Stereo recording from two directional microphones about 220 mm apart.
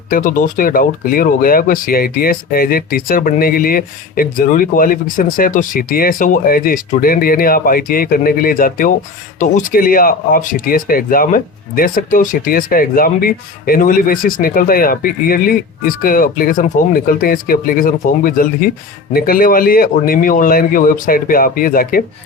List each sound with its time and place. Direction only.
0.1 s speech: 35° left (ahead or behind)